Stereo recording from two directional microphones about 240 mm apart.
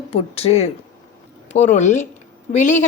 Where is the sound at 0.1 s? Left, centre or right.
Left.